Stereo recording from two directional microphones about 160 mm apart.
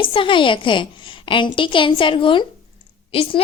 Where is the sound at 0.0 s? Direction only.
30° left (ahead or behind).